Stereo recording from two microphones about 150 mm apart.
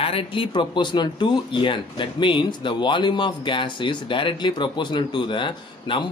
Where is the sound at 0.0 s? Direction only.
35° left (ahead or behind).